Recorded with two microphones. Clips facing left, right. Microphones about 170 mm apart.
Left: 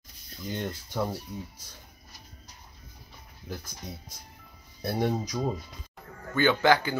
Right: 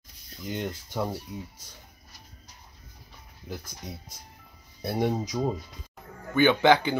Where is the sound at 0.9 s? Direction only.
5° right (ahead or behind).